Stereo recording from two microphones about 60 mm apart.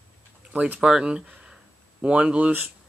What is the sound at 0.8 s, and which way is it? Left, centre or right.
Speech, centre.